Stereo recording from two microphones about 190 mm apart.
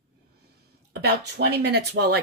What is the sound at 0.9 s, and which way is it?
Speech, 60° right (ahead or behind).